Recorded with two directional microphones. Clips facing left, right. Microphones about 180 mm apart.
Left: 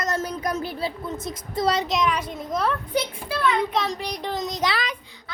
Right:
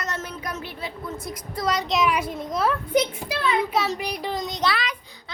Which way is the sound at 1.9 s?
5° right (ahead or behind).